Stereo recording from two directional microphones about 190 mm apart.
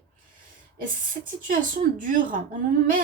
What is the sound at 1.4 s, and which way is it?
Speech, 45° right (ahead or behind).